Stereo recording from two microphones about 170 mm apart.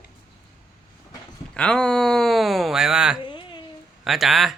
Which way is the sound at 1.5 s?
5° left (ahead or behind).